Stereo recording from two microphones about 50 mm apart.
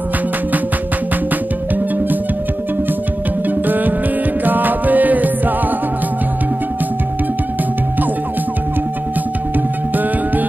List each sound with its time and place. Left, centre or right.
3.4 s music: right